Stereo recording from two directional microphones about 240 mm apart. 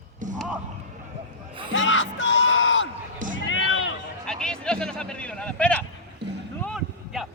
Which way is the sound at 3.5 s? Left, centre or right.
Left.